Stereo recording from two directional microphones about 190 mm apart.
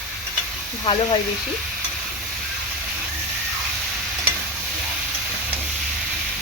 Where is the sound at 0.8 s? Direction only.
25° left (ahead or behind).